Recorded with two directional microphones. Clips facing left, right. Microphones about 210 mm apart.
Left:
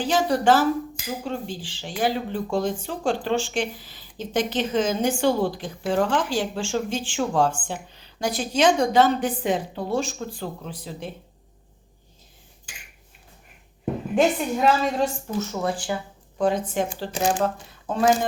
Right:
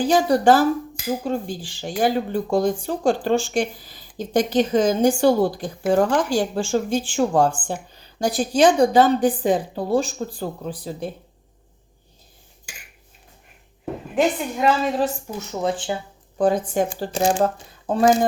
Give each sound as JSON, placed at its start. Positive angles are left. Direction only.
{"t": 0.0, "sound": "speech", "side_deg": -40}
{"t": 8.2, "sound": "a woman's voice", "side_deg": -35}
{"t": 14.2, "sound": "a woman's voice", "side_deg": 0}
{"t": 16.4, "sound": "a woman's voice", "side_deg": -40}